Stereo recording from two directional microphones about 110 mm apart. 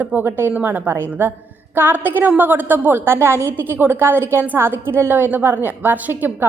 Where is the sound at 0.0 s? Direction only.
15° right (ahead or behind).